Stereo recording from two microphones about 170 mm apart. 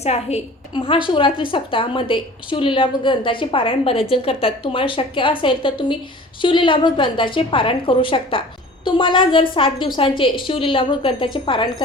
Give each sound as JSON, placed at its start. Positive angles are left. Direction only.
{"t": 0.0, "sound": "a woman's voice", "side_deg": 40}